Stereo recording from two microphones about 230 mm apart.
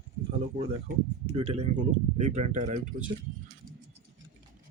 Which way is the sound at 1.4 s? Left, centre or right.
Right.